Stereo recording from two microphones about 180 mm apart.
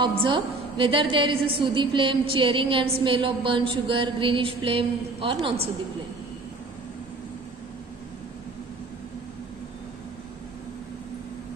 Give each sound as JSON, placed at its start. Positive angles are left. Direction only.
{"t": 0.0, "sound": "a woman's voice", "side_deg": -25}